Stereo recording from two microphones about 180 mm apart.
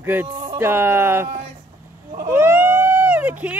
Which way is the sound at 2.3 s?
10° right (ahead or behind).